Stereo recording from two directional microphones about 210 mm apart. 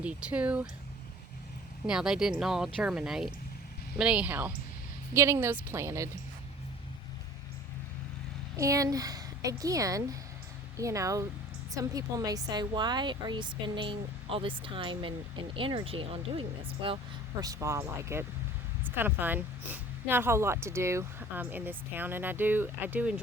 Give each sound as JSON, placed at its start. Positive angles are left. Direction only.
{"t": 0.0, "sound": "speech", "side_deg": -5}
{"t": 1.9, "sound": "speech", "side_deg": -5}
{"t": 8.5, "sound": "speech", "side_deg": -15}